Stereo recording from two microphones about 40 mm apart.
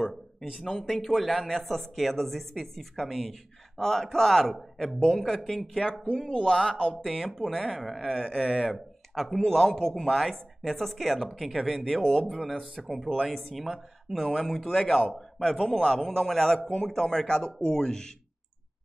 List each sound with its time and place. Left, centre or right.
0.6 s speech: centre
0.8 s speech: centre
5.8 s speech: centre
6.4 s speech: centre
8.1 s speech: centre
9.1 s speech: centre
12.3 s speech: centre